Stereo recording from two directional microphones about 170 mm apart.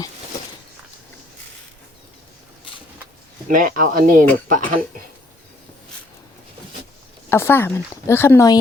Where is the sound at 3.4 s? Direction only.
55° right (ahead or behind).